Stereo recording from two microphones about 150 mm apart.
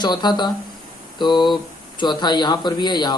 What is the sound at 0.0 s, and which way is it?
A man's voice, 30° left (ahead or behind).